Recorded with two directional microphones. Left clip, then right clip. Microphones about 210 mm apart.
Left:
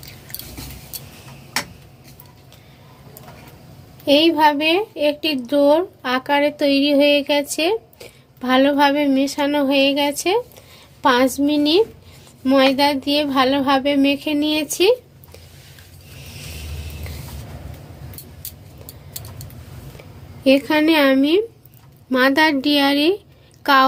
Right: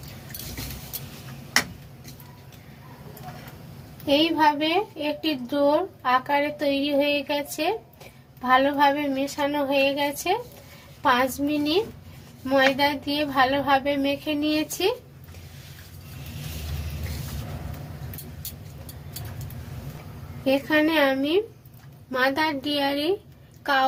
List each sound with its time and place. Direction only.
4.0 s a woman's voice: 60° left (ahead or behind)
20.4 s a woman's voice: 55° left (ahead or behind)